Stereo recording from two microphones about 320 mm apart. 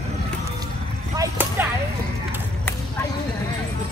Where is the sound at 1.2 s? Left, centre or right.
Centre.